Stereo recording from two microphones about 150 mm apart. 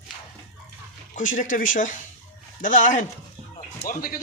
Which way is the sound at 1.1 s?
60° left (ahead or behind).